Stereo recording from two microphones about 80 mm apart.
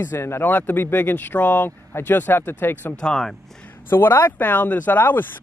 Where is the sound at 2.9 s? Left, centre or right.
Centre.